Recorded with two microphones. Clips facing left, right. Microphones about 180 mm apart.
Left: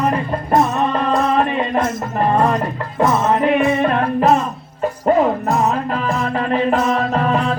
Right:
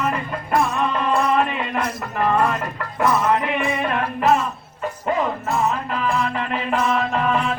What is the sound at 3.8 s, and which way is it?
Music, 40° left (ahead or behind).